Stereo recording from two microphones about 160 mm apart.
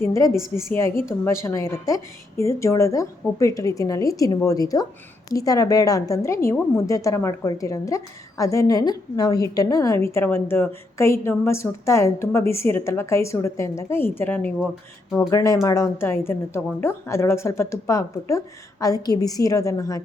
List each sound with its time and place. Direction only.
0.0 s a woman's voice: 20° left (ahead or behind)